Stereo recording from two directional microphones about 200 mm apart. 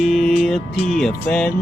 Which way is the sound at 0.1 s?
Centre (ahead or behind).